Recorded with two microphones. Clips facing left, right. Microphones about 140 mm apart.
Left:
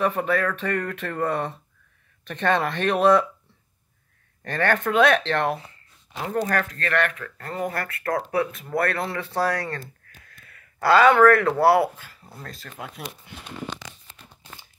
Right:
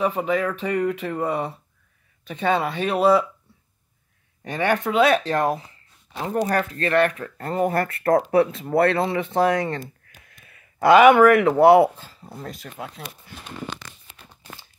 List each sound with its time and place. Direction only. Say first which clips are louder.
0.0 s speech: right 1 dB; 10° right (ahead or behind)
4.4 s speech: right 1 dB; 15° right (ahead or behind)
12.7 s speech: right 1 dB; centre (ahead or behind)